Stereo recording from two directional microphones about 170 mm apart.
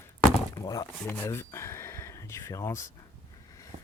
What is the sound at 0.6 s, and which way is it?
Speech, 20° left (ahead or behind).